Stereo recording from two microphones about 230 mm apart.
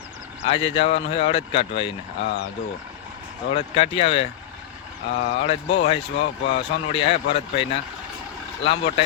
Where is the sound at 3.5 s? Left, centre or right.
Left.